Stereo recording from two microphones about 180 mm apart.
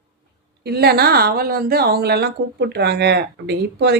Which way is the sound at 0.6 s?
60° right (ahead or behind).